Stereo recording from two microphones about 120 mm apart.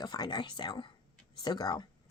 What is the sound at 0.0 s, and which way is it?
Speech, 35° left (ahead or behind).